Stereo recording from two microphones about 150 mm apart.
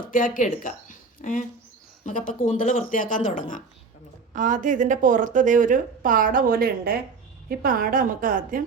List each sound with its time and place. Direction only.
0.0 s speech: 65° left (ahead or behind)
4.4 s a woman's voice: 60° right (ahead or behind)